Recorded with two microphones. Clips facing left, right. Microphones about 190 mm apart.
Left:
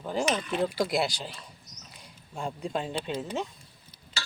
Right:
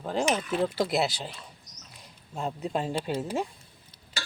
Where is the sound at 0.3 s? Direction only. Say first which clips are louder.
Right 1 dB; 5° right (ahead or behind).